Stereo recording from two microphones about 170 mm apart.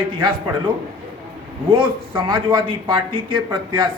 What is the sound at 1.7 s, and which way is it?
Speech, 30° right (ahead or behind).